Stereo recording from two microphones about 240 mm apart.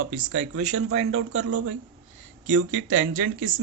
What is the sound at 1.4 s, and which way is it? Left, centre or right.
Speech, right.